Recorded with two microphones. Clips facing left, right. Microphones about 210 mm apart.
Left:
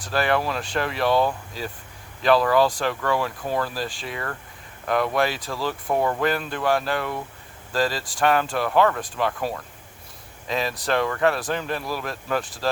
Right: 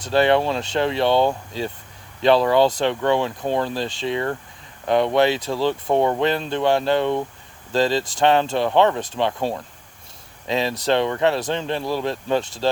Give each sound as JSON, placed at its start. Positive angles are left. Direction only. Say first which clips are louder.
{"t": 0.0, "sound": "speech", "louder": "right 6 dB", "side_deg": -25}